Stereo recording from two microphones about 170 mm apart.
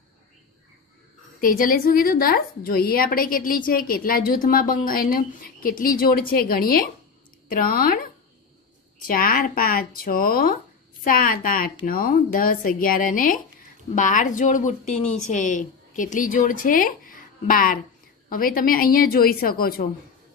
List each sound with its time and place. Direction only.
1.4 s a woman's voice: 55° left (ahead or behind)
9.0 s a woman's voice: 55° left (ahead or behind)